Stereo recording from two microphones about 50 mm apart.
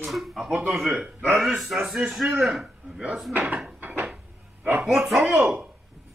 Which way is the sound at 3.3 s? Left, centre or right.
Right.